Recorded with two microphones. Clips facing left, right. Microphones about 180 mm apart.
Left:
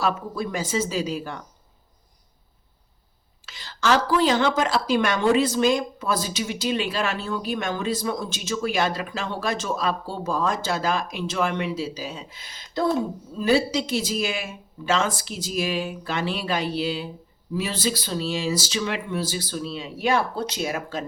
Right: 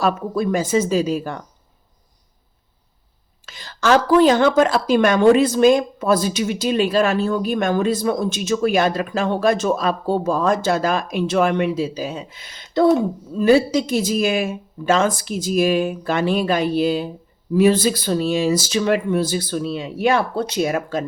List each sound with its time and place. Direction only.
0.0 s a woman's voice: 50° right (ahead or behind)
3.4 s a woman's voice: 50° right (ahead or behind); by 12.9 s 65° right (ahead or behind)
13.4 s a woman's voice: 50° right (ahead or behind)